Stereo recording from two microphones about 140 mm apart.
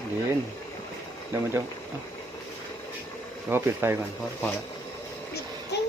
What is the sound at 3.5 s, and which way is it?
Speech, 15° right (ahead or behind).